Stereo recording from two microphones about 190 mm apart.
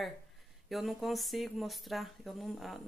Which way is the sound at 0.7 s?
Centre (ahead or behind).